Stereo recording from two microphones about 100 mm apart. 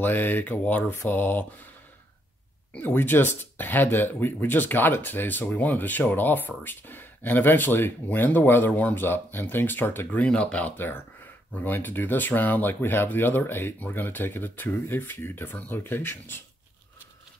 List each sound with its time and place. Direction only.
0.0 s speech: 20° left (ahead or behind)
2.7 s speech: 20° left (ahead or behind)